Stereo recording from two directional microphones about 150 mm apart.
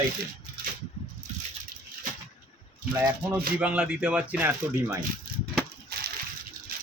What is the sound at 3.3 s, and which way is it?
Speech, 10° right (ahead or behind).